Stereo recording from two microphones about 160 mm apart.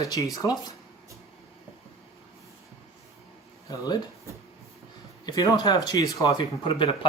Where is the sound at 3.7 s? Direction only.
25° left (ahead or behind).